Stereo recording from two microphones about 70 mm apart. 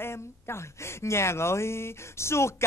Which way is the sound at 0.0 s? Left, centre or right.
Left.